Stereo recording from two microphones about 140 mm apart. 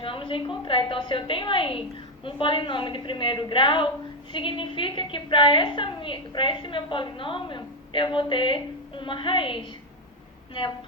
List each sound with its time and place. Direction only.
0.0 s a woman's voice: 40° left (ahead or behind)